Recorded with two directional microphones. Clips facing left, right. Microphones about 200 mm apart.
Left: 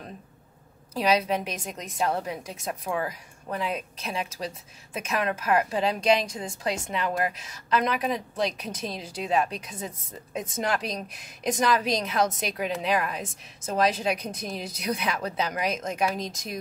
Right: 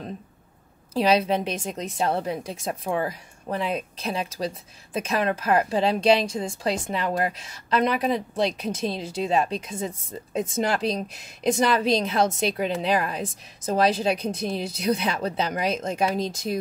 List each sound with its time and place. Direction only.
0.9 s a woman's voice: 30° right (ahead or behind)